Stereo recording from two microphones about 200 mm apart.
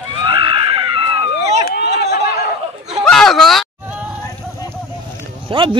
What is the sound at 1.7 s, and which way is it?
Chatter, 55° left (ahead or behind).